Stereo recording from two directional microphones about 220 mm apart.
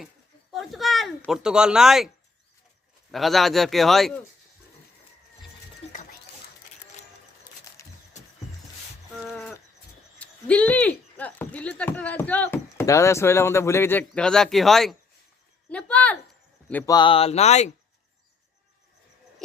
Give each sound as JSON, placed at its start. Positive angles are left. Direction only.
{"t": 0.5, "sound": "speech", "side_deg": 0}
{"t": 3.1, "sound": "speech", "side_deg": 0}
{"t": 7.8, "sound": "horse", "side_deg": 15}
{"t": 9.2, "sound": "a sound", "side_deg": 5}
{"t": 10.2, "sound": "speech", "side_deg": 5}
{"t": 16.9, "sound": "speech", "side_deg": 20}